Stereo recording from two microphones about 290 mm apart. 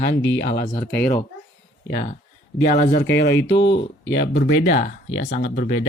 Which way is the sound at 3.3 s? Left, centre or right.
Left.